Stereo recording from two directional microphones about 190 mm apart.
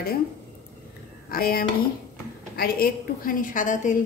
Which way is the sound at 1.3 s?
50° left (ahead or behind).